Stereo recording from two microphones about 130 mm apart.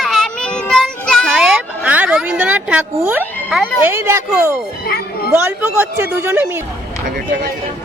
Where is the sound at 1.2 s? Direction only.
10° right (ahead or behind).